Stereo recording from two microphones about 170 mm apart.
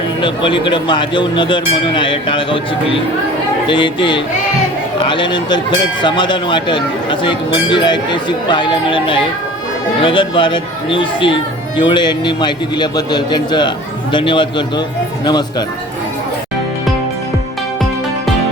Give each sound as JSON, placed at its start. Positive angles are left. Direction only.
{"t": 0.2, "sound": "speech", "side_deg": 30}